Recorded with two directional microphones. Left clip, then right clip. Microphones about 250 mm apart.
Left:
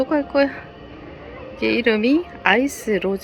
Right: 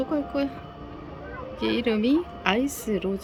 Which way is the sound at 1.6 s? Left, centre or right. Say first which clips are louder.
Left 7 dB; centre.